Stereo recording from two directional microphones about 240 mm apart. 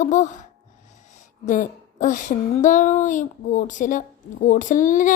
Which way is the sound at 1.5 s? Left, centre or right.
Left.